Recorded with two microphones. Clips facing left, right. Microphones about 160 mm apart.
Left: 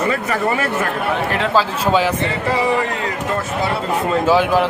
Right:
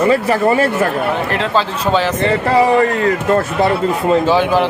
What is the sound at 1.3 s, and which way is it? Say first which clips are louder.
Speech: right 1 dB; centre (ahead or behind).